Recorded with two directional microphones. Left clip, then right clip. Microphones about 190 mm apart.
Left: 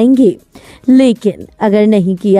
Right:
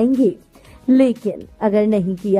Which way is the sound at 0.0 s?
45° left (ahead or behind).